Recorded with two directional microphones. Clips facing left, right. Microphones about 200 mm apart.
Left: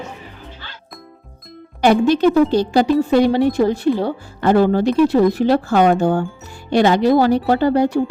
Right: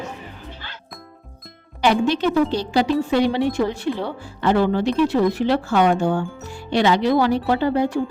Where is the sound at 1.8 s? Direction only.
45° left (ahead or behind).